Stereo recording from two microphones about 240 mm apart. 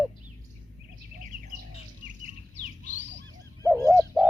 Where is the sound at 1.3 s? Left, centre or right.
Left.